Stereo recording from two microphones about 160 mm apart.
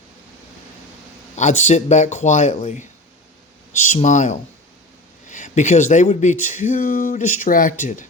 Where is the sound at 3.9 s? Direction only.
50° left (ahead or behind).